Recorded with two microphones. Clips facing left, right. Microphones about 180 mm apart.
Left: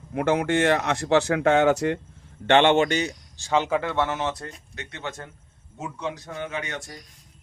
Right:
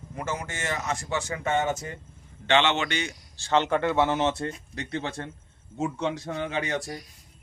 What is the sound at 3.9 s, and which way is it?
A man's voice, 20° right (ahead or behind).